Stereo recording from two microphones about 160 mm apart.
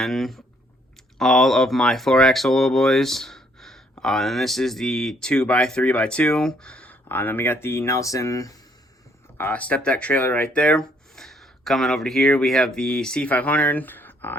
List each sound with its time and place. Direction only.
0.0 s speech: centre (ahead or behind); by 8.5 s 20° left (ahead or behind)
9.4 s speech: 10° left (ahead or behind)